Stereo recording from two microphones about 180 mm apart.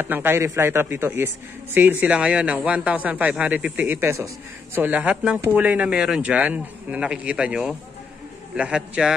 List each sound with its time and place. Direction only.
0.0 s a man's voice: 10° right (ahead or behind)